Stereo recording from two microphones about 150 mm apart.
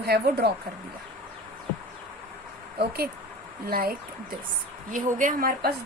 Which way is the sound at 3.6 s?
80° right.